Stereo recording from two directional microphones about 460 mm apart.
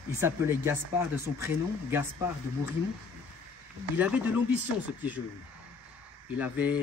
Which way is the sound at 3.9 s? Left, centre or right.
Centre.